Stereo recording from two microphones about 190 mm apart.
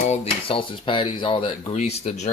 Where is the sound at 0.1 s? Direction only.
30° left (ahead or behind).